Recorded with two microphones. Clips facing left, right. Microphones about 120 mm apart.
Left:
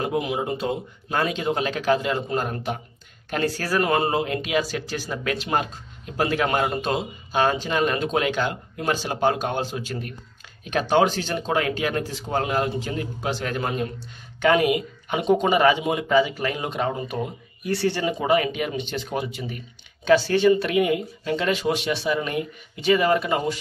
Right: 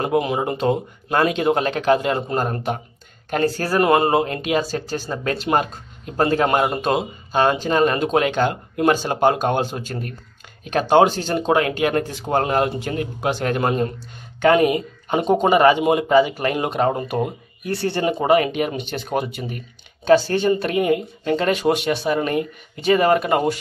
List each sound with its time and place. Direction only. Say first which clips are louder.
0.1 s a man's voice: right 5 dB; 65° right (ahead or behind); by 6.3 s 50° right (ahead or behind)
6.3 s a man's voice: right 4 dB; 35° right (ahead or behind)
14.4 s a man's voice: right 4 dB; 40° right (ahead or behind)